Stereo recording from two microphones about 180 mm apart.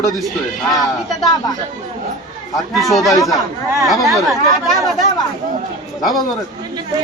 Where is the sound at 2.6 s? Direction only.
Centre (ahead or behind).